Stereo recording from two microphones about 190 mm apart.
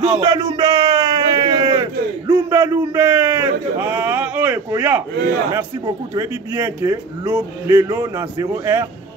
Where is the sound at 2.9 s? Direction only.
10° right (ahead or behind).